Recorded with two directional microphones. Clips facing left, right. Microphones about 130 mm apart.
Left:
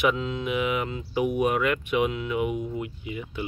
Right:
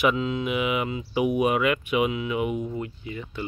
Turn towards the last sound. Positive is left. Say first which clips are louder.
# left 1 dB
turn(degrees=15)  # may be behind; listen again after turning